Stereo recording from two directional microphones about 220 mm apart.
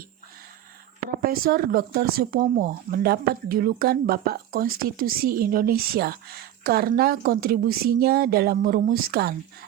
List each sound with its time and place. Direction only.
1.2 s speech: 40° right (ahead or behind)